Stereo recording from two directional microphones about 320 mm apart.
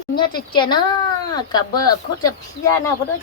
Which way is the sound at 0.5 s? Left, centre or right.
Centre.